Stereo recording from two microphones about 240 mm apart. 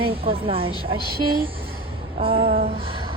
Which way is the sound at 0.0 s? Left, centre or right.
Right.